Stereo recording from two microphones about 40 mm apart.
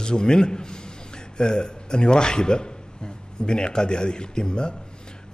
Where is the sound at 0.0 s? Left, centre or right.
Centre.